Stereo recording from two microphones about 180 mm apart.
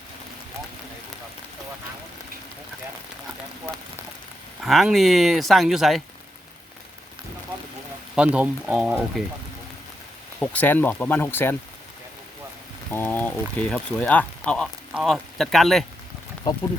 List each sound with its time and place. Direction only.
4.6 s speech: centre (ahead or behind)
8.1 s speech: 5° right (ahead or behind)
10.4 s speech: 10° left (ahead or behind)
12.9 s speech: 10° left (ahead or behind)
16.5 s speech: 20° left (ahead or behind)